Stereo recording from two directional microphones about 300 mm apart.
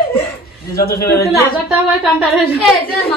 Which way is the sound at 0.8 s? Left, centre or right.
Left.